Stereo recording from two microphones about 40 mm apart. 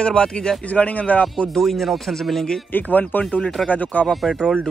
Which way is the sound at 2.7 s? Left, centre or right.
Left.